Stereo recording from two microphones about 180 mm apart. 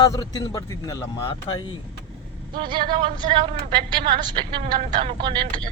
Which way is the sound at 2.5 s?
25° right (ahead or behind).